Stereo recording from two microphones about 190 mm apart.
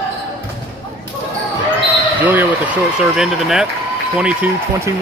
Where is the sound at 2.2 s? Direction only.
10° right (ahead or behind).